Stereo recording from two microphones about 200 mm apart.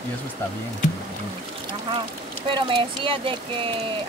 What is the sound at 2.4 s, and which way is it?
Speech, 25° right (ahead or behind).